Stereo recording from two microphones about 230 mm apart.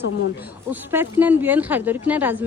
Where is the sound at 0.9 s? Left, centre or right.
Centre.